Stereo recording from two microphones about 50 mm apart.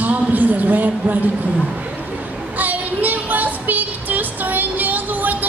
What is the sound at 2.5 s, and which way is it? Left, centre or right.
Child singing, right.